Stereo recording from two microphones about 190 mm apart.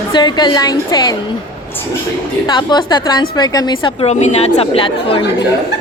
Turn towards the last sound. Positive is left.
turn(degrees=25)  # may be behind; listen again after turning